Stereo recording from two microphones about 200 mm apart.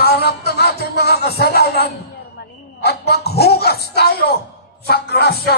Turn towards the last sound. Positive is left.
turn(degrees=55)  # may be behind; listen again after turning